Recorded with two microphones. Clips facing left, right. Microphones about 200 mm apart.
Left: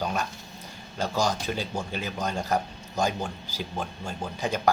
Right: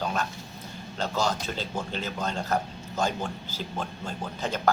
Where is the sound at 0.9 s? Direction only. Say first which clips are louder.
Left 1 dB; 10° left (ahead or behind).